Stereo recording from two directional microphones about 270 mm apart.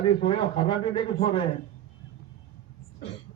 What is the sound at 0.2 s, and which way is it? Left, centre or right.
A man's voice, centre.